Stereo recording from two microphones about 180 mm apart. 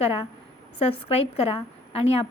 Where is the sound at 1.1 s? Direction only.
35° left (ahead or behind).